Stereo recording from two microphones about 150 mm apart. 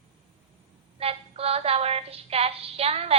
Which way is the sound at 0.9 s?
40° right (ahead or behind).